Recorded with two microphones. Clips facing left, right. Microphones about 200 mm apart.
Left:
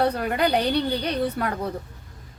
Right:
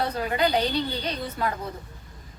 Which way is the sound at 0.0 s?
60° left (ahead or behind).